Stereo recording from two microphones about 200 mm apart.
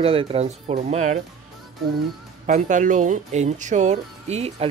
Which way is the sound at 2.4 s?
40° right (ahead or behind).